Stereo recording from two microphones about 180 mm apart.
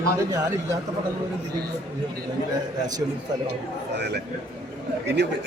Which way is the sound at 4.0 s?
65° right (ahead or behind).